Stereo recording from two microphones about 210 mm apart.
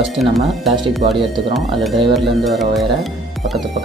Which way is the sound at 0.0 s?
Centre (ahead or behind).